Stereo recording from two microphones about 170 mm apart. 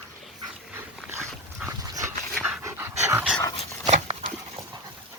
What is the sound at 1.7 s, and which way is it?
Dog, 20° right (ahead or behind).